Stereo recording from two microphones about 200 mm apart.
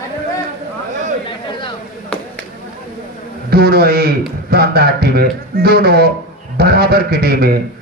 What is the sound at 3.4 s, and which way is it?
A man's voice, 50° right (ahead or behind).